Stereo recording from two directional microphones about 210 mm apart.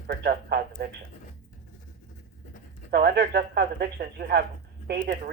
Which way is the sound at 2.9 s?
50° right (ahead or behind).